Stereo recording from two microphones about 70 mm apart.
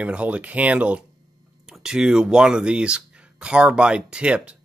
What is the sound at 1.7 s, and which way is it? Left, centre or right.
Speech, centre.